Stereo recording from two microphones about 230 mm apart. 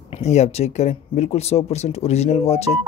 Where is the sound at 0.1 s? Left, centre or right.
Left.